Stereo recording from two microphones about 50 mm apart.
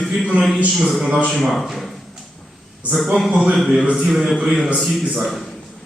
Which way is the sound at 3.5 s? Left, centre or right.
Centre.